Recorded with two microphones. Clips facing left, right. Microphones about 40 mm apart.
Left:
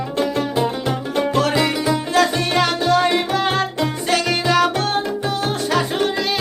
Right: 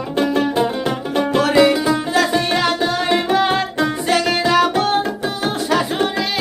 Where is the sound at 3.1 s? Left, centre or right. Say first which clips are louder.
Right 2 dB; centre.